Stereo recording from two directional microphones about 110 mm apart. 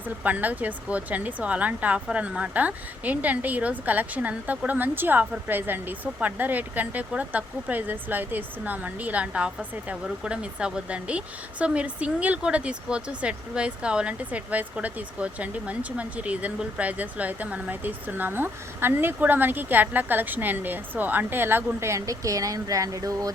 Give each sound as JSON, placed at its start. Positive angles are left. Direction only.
{"t": 0.2, "sound": "speech", "side_deg": -15}